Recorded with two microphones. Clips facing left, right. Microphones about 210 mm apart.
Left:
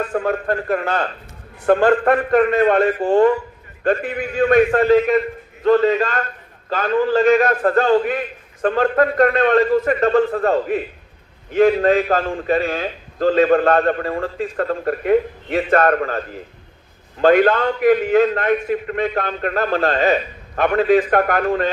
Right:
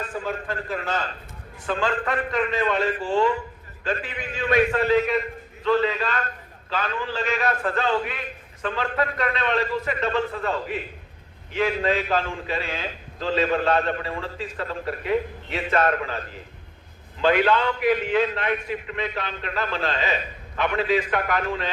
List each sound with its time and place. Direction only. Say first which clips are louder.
0.0 s a man's voice: left 9 dB; 60° left (ahead or behind)